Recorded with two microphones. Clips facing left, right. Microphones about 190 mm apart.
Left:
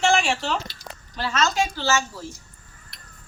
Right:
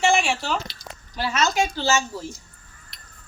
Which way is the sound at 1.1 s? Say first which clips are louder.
Right 1 dB; 10° right (ahead or behind).